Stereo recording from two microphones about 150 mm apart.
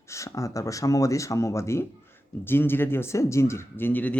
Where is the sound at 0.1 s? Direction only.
20° left (ahead or behind).